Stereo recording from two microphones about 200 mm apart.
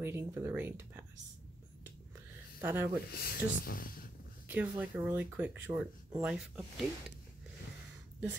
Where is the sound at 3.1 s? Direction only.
50° left (ahead or behind).